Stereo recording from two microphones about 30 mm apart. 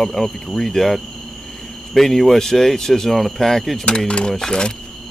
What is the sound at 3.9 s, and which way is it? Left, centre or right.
Speech, left.